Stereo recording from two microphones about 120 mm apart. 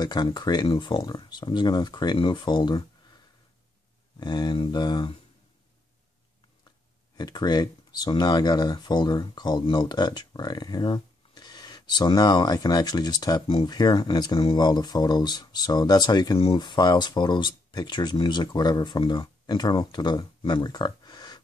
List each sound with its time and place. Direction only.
0.0 s speech: 35° left (ahead or behind)
4.2 s speech: 35° left (ahead or behind)
7.2 s speech: 35° left (ahead or behind)